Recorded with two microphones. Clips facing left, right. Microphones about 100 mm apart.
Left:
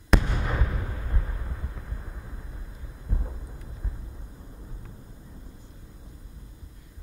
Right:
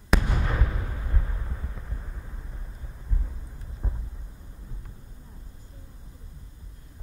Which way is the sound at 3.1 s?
50° left (ahead or behind).